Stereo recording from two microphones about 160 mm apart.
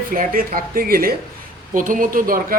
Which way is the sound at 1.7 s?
55° right (ahead or behind).